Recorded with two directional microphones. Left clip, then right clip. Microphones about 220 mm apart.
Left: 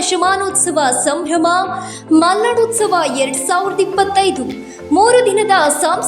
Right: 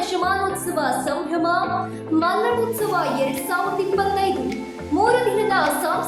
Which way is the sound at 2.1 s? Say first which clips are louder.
Left 8 dB; 40° left (ahead or behind).